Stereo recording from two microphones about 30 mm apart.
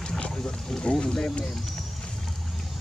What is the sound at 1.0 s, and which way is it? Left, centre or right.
Speech, left.